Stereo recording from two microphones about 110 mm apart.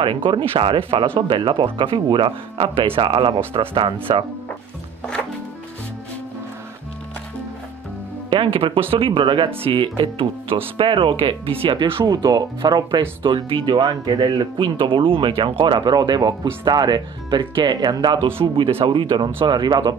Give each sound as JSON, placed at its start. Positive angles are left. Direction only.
{"t": 0.0, "sound": "speech", "side_deg": -50}
{"t": 8.3, "sound": "speech", "side_deg": -55}
{"t": 12.1, "sound": "speech", "side_deg": -40}